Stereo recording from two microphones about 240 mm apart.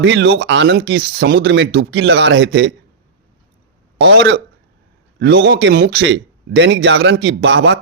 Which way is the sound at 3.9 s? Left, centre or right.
Right.